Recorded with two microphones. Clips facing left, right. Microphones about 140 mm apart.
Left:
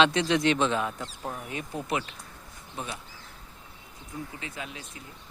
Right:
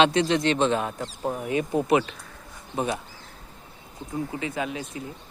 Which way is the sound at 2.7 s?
60° right (ahead or behind).